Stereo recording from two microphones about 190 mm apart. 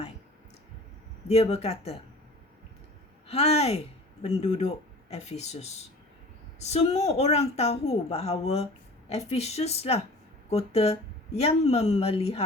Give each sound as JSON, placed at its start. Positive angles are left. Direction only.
{"t": 1.3, "sound": "a woman's voice", "side_deg": 35}
{"t": 3.2, "sound": "a woman's voice", "side_deg": 35}